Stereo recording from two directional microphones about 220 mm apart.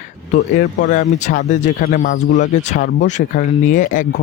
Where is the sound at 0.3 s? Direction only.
45° left (ahead or behind).